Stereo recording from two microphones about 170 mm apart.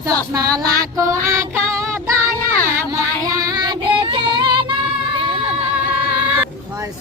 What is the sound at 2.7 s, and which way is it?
Music, 20° right (ahead or behind).